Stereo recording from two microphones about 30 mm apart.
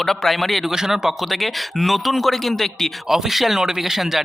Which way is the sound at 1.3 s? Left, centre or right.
Centre.